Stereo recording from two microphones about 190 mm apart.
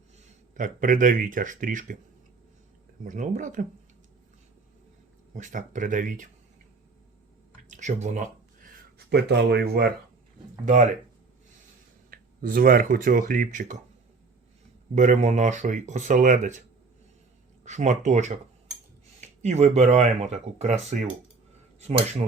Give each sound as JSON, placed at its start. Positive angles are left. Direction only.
{"t": 0.5, "sound": "speech", "side_deg": -45}
{"t": 3.0, "sound": "speech", "side_deg": -45}
{"t": 5.3, "sound": "speech", "side_deg": -40}
{"t": 7.7, "sound": "speech", "side_deg": -40}
{"t": 9.0, "sound": "speech", "side_deg": -60}
{"t": 10.7, "sound": "speech", "side_deg": -40}
{"t": 12.1, "sound": "speech", "side_deg": -50}
{"t": 14.9, "sound": "speech", "side_deg": -40}
{"t": 17.7, "sound": "speech", "side_deg": -40}